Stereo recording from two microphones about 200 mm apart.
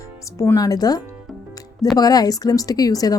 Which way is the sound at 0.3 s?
15° left (ahead or behind).